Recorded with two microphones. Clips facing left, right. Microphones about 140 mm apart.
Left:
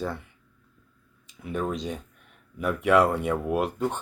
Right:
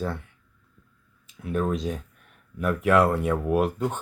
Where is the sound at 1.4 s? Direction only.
Centre (ahead or behind).